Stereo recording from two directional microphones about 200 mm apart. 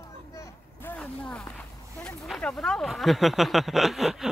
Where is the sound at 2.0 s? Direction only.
Centre (ahead or behind).